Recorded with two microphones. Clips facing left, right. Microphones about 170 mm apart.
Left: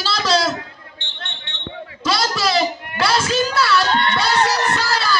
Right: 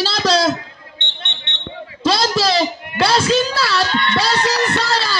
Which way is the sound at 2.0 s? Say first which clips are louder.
Right 4 dB; 35° right (ahead or behind).